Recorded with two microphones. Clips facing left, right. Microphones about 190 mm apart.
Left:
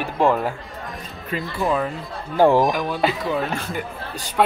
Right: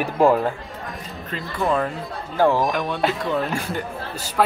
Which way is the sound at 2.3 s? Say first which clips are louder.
Left 3 dB; 15° left (ahead or behind).